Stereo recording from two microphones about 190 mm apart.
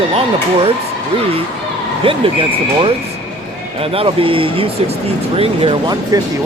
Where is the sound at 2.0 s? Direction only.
30° right (ahead or behind).